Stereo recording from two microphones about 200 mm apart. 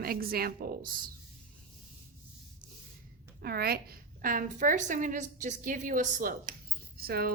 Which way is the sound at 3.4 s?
50° right (ahead or behind).